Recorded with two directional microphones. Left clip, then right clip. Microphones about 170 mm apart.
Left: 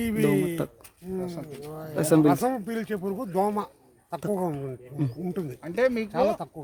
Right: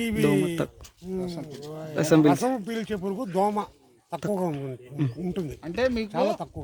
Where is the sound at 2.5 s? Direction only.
15° right (ahead or behind).